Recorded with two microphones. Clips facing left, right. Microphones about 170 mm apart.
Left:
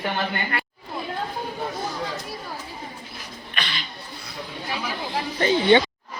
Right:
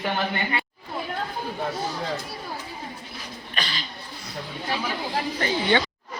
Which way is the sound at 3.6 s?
35° right (ahead or behind).